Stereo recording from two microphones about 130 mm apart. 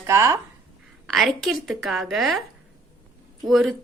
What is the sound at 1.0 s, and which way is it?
A woman's voice, centre (ahead or behind).